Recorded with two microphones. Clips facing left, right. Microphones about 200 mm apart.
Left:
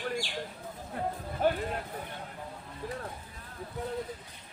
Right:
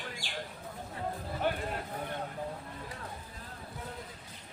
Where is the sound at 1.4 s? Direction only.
40° left (ahead or behind).